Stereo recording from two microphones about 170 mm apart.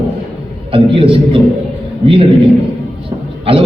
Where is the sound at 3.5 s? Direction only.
35° right (ahead or behind).